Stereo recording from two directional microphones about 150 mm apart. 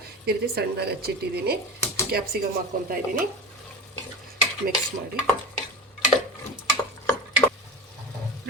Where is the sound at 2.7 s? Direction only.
75° right (ahead or behind).